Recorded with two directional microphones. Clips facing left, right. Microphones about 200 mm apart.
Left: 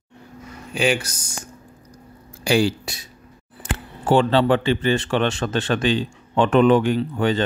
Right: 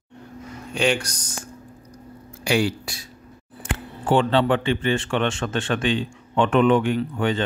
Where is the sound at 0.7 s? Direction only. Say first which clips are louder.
Left 1 dB; 5° left (ahead or behind).